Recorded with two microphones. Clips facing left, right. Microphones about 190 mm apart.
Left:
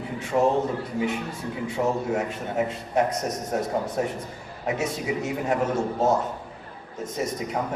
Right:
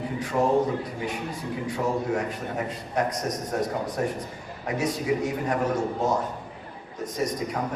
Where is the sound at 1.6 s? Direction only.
25° left (ahead or behind).